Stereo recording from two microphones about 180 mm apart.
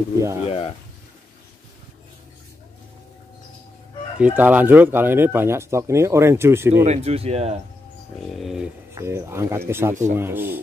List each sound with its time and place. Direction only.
0.2 s speech: 15° right (ahead or behind)
0.5 s speech: 30° left (ahead or behind)
4.2 s speech: 10° right (ahead or behind)
6.8 s speech: 35° right (ahead or behind)
8.3 s speech: centre (ahead or behind)
8.9 s speech: 15° right (ahead or behind)